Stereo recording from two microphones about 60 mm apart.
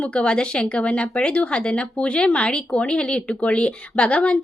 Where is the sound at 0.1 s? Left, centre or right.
Centre.